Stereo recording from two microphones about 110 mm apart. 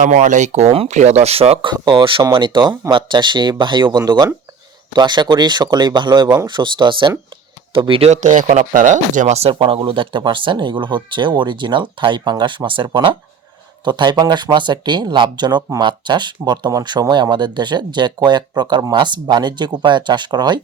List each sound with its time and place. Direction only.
0.1 s speech: 90° right; by 1.5 s 65° right (ahead or behind)
1.6 s speech: 45° right (ahead or behind)
6.5 s speech: 45° right (ahead or behind)
8.1 s speech: 90° right
9.5 s speech: 55° right (ahead or behind)